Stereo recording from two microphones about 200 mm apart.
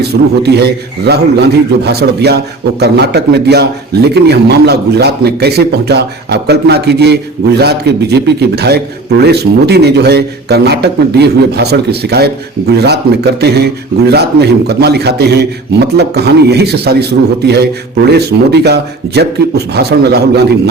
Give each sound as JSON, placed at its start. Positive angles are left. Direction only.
{"t": 0.0, "sound": "a man's voice", "side_deg": -55}